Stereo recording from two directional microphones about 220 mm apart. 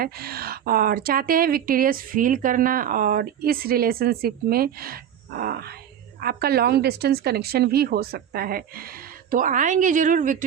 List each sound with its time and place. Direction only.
0.0 s a woman's voice: 45° right (ahead or behind)